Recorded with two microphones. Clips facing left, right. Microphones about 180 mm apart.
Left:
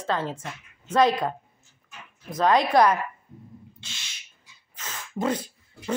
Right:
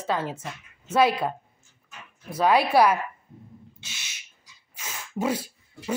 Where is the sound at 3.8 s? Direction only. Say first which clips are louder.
Even; 10° right (ahead or behind).